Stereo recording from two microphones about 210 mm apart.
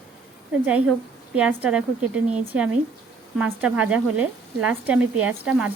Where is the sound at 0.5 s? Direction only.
5° right (ahead or behind).